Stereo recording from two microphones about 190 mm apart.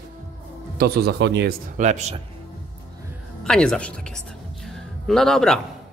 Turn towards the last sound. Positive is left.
turn(degrees=0)  # may be behind; listen again after turning